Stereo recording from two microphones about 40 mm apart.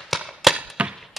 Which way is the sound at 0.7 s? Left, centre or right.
Right.